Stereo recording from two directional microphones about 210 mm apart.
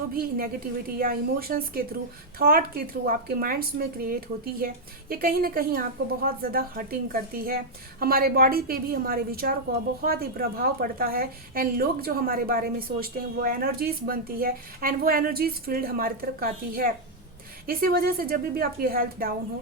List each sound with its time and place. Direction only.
0.1 s a woman's voice: 45° right (ahead or behind)